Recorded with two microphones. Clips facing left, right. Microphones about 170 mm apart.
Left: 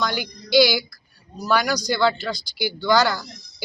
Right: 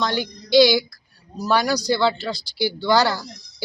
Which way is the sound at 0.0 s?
25° right (ahead or behind).